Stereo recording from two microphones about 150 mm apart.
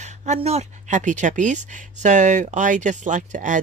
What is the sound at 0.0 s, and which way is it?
Speech, 50° right (ahead or behind).